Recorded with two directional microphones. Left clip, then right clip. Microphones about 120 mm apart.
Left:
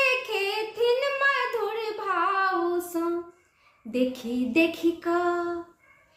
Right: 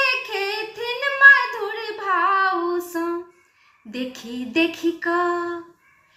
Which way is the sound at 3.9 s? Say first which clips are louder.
Left 4 dB; 50° left (ahead or behind).